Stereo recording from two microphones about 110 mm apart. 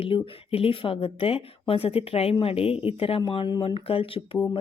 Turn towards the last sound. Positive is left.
turn(degrees=60)  # may be behind; listen again after turning